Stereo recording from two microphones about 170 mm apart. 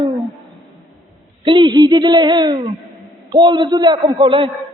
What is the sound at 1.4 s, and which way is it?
A man's voice, 30° right (ahead or behind).